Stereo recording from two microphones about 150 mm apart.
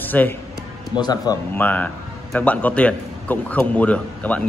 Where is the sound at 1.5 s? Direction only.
10° left (ahead or behind).